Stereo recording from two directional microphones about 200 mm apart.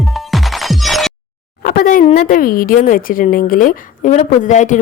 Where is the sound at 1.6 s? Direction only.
45° left (ahead or behind).